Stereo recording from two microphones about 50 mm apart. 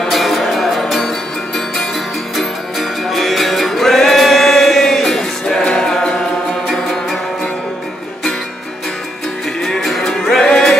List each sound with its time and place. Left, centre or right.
0.1 s music: centre
2.3 s music: centre
9.8 s music: centre